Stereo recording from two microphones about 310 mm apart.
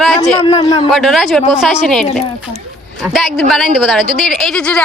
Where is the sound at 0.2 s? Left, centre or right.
Centre.